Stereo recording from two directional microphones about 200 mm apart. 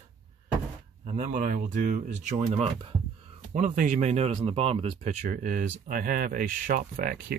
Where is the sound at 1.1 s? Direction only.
40° right (ahead or behind).